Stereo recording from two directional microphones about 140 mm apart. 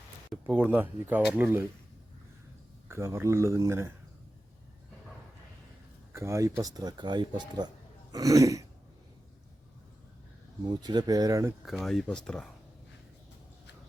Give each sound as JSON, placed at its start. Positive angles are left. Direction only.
{"t": 0.4, "sound": "speech", "side_deg": -10}
{"t": 2.9, "sound": "speech", "side_deg": -20}
{"t": 6.1, "sound": "speech", "side_deg": -20}
{"t": 10.6, "sound": "speech", "side_deg": -30}
{"t": 11.6, "sound": "speech", "side_deg": 0}